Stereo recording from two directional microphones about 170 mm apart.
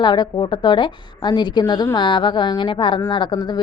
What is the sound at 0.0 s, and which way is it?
A woman's voice, 25° left (ahead or behind).